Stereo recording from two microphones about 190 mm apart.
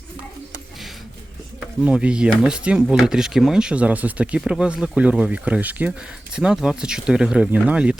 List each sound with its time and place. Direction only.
1.8 s speech: 5° right (ahead or behind)